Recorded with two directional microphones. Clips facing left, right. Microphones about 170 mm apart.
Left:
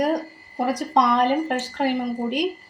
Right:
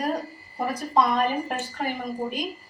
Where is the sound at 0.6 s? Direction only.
80° left.